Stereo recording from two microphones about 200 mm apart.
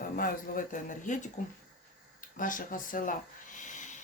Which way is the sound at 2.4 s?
45° left (ahead or behind).